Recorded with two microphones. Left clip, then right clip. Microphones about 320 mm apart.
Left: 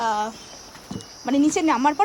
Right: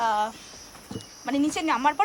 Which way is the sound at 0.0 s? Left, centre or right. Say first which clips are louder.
Left 1 dB; centre.